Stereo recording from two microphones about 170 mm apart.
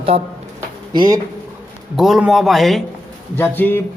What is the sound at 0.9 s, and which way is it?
Speech, 25° right (ahead or behind).